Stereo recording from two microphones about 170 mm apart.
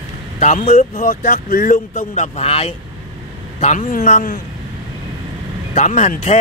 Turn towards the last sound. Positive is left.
turn(degrees=40)  # may be behind; listen again after turning